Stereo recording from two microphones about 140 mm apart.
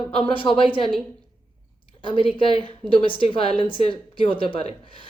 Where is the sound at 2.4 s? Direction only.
40° left (ahead or behind).